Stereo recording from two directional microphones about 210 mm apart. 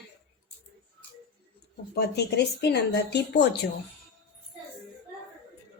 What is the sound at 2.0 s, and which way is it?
Speech, 50° left (ahead or behind).